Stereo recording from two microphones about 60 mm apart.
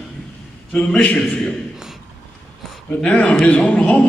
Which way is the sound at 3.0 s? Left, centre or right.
Left.